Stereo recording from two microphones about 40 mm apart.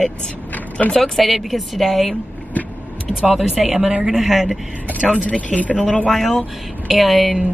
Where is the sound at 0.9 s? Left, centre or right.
Centre.